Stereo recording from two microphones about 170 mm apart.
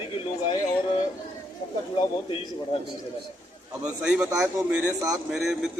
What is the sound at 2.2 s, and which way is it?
Speech, 35° left (ahead or behind).